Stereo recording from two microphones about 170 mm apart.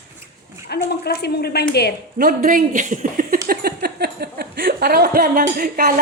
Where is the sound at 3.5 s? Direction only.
65° right (ahead or behind).